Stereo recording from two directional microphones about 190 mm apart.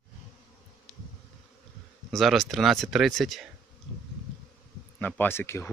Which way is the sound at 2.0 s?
Centre (ahead or behind).